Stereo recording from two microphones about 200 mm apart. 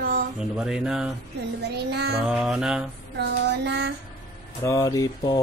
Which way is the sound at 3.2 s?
55° right (ahead or behind).